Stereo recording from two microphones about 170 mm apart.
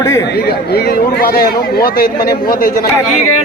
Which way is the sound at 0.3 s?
70° left (ahead or behind).